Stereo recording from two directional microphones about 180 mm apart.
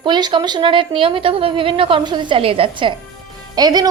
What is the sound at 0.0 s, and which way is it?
A woman's voice, 25° right (ahead or behind).